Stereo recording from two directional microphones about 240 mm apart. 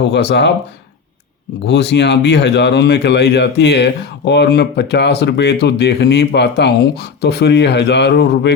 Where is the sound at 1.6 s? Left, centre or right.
Left.